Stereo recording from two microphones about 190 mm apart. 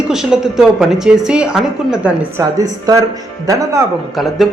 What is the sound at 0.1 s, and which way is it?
A woman's voice, centre (ahead or behind).